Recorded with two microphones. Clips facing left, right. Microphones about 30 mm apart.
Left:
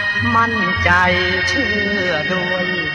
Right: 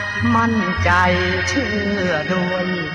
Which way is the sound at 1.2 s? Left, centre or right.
Centre.